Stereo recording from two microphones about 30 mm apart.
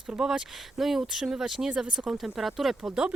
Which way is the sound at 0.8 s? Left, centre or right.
Centre.